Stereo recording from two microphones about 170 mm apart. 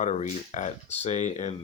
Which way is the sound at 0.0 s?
45° left (ahead or behind).